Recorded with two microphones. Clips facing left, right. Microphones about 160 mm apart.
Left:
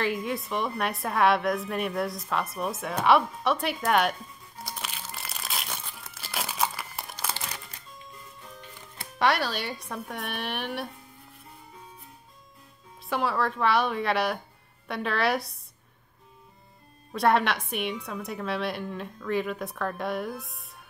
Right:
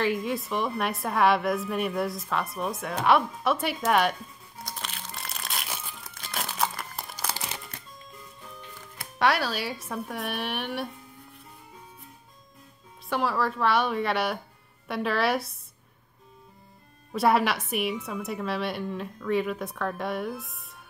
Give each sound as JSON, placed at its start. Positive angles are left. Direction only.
{"t": 0.0, "sound": "a woman's voice", "side_deg": 0}
{"t": 4.6, "sound": "crushing", "side_deg": 5}
{"t": 6.1, "sound": "crumpling", "side_deg": 5}
{"t": 9.2, "sound": "a woman's voice", "side_deg": 0}
{"t": 13.1, "sound": "a woman's voice", "side_deg": 0}
{"t": 17.1, "sound": "a woman's voice", "side_deg": -5}